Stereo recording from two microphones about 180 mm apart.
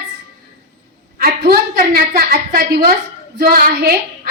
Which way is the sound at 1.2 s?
55° right (ahead or behind).